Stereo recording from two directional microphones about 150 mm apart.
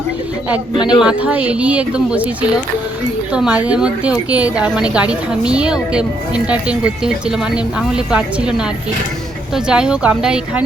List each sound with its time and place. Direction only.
0.8 s a man's voice: 30° left (ahead or behind)
1.0 s speech: 10° right (ahead or behind)